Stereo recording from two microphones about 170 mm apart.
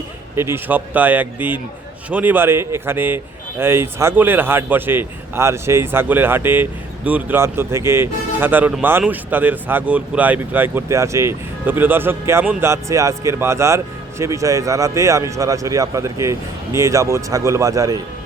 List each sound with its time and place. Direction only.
0.3 s speech: 15° right (ahead or behind)